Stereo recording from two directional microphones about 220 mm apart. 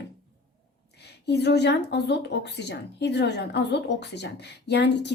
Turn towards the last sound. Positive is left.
turn(degrees=50)  # may be behind; listen again after turning